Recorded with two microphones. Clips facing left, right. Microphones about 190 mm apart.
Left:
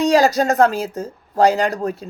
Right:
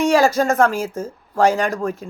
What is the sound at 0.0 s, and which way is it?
Speech, 40° left (ahead or behind).